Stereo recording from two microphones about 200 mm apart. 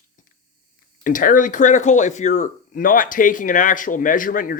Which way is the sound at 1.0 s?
40° left (ahead or behind).